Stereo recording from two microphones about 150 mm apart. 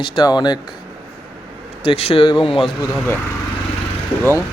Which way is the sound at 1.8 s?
40° left (ahead or behind).